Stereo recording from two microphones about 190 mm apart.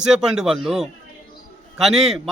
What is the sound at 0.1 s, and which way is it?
A man's voice, 5° right (ahead or behind).